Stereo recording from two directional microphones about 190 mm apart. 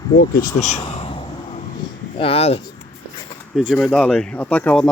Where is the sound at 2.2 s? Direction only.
30° left (ahead or behind).